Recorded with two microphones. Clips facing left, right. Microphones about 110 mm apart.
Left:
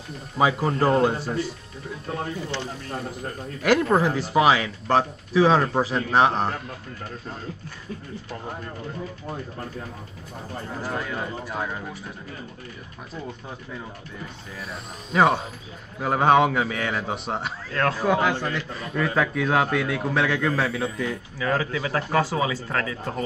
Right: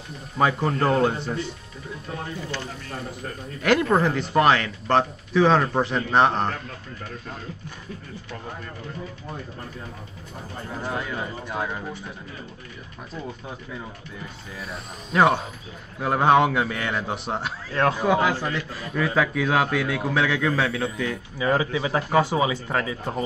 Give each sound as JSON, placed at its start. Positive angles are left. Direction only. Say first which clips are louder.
{"t": 0.4, "sound": "a man's voice", "louder": "even", "side_deg": 5}
{"t": 2.1, "sound": "speech", "louder": "left 2 dB", "side_deg": 25}
{"t": 3.6, "sound": "a man's voice", "louder": "even", "side_deg": 5}
{"t": 10.7, "sound": "a man's voice", "louder": "right 1 dB", "side_deg": 0}
{"t": 14.6, "sound": "a man's voice", "louder": "even", "side_deg": 0}
{"t": 17.7, "sound": "speech", "louder": "right 2 dB", "side_deg": -20}
{"t": 18.0, "sound": "a man's voice", "louder": "right 1 dB", "side_deg": -5}
{"t": 21.4, "sound": "speech", "louder": "right 3 dB", "side_deg": -15}